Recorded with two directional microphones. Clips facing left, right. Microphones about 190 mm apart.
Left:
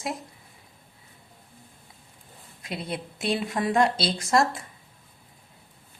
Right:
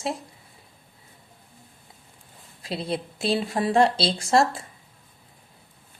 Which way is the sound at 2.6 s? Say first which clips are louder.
Right 4 dB; 30° right (ahead or behind).